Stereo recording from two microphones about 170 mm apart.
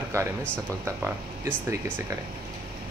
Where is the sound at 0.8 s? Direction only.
15° right (ahead or behind).